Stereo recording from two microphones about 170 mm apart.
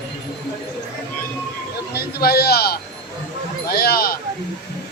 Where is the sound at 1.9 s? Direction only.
70° left (ahead or behind).